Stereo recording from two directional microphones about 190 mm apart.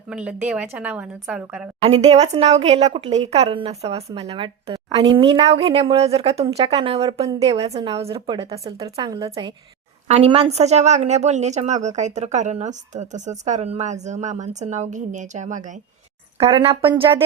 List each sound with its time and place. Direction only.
0.1 s a woman's voice: 5° right (ahead or behind)
1.8 s speech: 30° right (ahead or behind)
10.1 s speech: 30° right (ahead or behind)
16.5 s speech: 25° right (ahead or behind)